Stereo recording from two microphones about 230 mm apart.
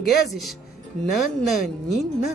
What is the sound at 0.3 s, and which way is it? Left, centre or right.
Speech, centre.